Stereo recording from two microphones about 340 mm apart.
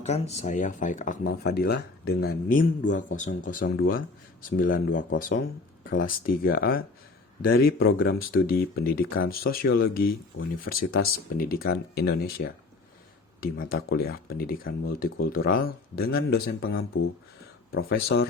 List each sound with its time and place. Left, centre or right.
0.0 s speech: centre